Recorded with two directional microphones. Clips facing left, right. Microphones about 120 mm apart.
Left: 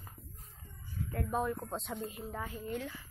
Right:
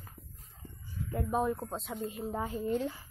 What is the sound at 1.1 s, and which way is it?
Speech, 20° right (ahead or behind).